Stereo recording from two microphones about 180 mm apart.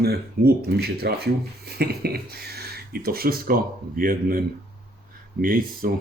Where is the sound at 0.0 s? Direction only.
60° right (ahead or behind).